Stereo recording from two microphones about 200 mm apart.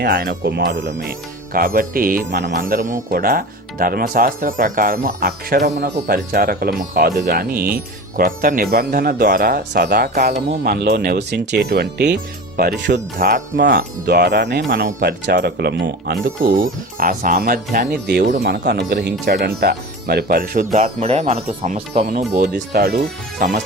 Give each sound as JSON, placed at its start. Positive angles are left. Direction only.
{"t": 0.0, "sound": "speech", "side_deg": -50}
{"t": 1.5, "sound": "speech", "side_deg": -45}
{"t": 13.2, "sound": "speech", "side_deg": -45}
{"t": 20.7, "sound": "speech", "side_deg": -35}